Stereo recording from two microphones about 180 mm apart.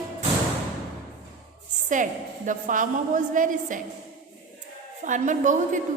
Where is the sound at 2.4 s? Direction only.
45° right (ahead or behind).